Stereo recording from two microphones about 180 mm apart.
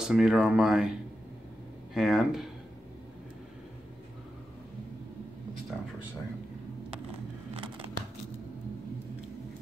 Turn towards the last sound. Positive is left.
turn(degrees=-30)  # may be behind; listen again after turning